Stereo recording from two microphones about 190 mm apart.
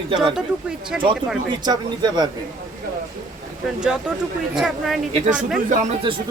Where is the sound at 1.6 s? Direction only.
20° right (ahead or behind).